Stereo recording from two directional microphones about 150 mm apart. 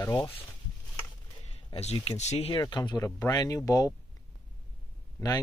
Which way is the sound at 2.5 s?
30° left (ahead or behind).